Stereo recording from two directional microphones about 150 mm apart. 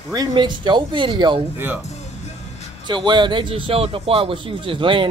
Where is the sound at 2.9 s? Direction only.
30° right (ahead or behind).